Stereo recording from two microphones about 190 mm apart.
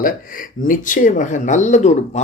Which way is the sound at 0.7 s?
45° left (ahead or behind).